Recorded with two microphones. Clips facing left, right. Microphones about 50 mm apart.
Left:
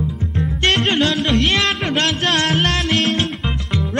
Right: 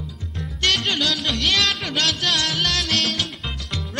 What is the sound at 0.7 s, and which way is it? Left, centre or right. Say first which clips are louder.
Music: left 5 dB; left.